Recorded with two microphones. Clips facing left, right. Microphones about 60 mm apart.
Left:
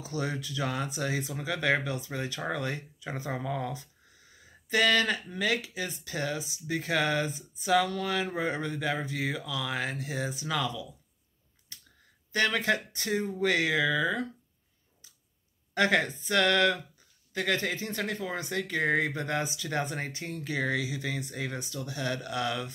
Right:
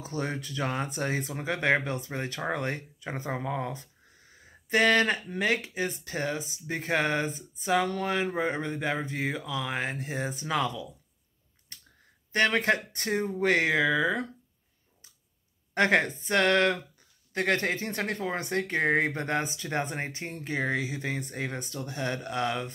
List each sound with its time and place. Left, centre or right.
0.0 s speech: right
11.7 s a sound: right
12.3 s speech: right
15.7 s speech: right